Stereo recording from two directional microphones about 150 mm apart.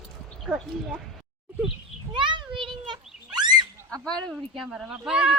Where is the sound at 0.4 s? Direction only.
5° right (ahead or behind).